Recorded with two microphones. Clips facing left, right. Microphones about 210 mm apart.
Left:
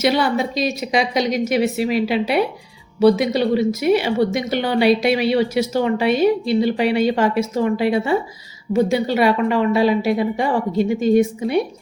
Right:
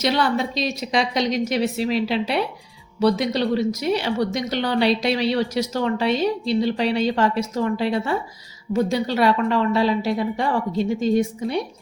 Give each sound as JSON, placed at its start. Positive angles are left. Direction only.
{"t": 0.0, "sound": "a woman's voice", "side_deg": 5}
{"t": 11.0, "sound": "a woman's voice", "side_deg": 55}